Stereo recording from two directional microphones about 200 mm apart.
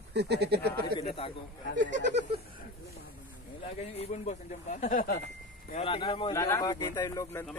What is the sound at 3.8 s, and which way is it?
Speech, 30° left (ahead or behind).